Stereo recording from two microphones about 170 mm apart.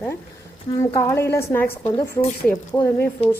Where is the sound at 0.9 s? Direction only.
15° left (ahead or behind).